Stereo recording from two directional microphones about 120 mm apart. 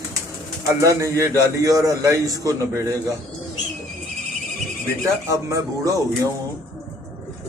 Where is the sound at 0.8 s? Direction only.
25° right (ahead or behind).